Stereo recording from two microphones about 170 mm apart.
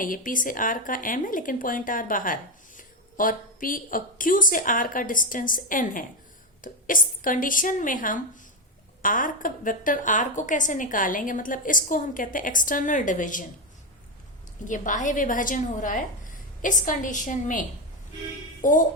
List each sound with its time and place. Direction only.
0.0 s speech: 55° left (ahead or behind)
14.6 s speech: 50° left (ahead or behind)